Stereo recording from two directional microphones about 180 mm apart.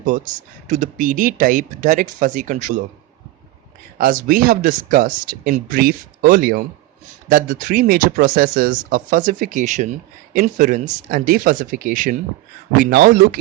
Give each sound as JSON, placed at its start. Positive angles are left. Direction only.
{"t": 0.0, "sound": "speech", "side_deg": -45}
{"t": 3.9, "sound": "speech", "side_deg": -50}